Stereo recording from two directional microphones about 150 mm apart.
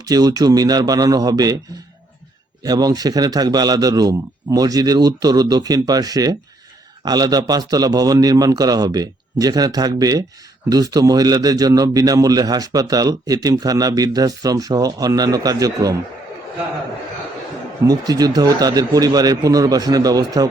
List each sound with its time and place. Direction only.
0.1 s a man's voice: 25° right (ahead or behind)
2.6 s a man's voice: 25° right (ahead or behind)
17.8 s a man's voice: 25° right (ahead or behind)